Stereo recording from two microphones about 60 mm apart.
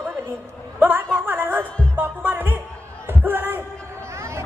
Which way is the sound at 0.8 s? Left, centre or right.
Right.